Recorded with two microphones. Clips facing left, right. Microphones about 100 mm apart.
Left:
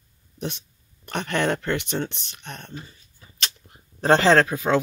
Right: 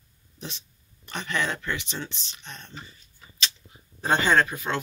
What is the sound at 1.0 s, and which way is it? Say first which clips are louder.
Speech: left 5 dB; 60° left (ahead or behind).